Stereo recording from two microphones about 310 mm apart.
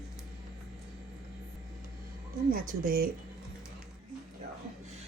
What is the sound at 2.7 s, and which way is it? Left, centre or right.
Speech, right.